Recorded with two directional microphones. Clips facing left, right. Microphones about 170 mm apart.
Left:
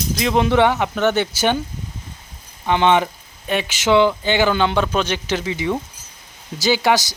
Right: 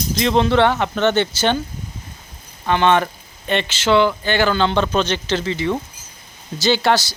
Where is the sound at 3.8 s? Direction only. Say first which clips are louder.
Left 1 dB; 15° left (ahead or behind).